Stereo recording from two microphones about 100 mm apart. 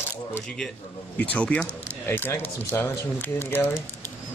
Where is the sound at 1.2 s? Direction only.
15° left (ahead or behind).